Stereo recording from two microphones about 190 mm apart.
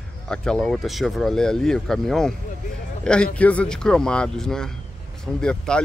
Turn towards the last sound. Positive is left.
turn(degrees=5)  # may be behind; listen again after turning